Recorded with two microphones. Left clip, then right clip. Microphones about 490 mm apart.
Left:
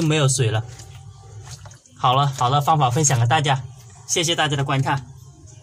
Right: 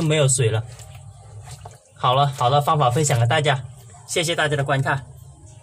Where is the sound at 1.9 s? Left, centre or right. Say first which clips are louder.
Even; right.